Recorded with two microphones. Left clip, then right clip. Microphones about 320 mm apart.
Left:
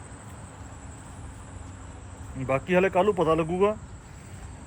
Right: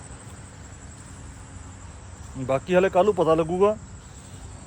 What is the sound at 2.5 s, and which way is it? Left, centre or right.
Speech, centre.